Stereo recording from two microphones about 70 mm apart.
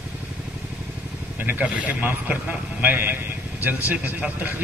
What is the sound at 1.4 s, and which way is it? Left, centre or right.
Speech, right.